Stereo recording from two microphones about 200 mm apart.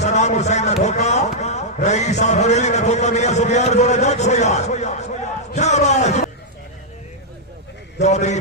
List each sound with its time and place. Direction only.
0.0 s a man's voice: 35° left (ahead or behind)
8.0 s a man's voice: 35° left (ahead or behind)